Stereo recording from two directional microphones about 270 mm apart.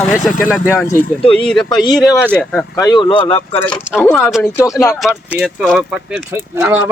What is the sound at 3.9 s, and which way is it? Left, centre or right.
Speech, centre.